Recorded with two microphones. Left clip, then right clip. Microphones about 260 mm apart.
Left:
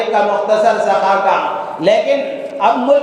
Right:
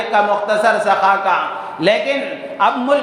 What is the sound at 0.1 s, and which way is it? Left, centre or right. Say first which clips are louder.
Speech: left 1 dB; right.